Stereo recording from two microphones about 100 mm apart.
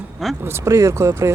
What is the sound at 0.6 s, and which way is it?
Speech, 30° right (ahead or behind).